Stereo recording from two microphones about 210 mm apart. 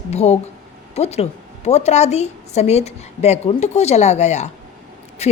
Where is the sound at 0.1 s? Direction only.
30° left (ahead or behind).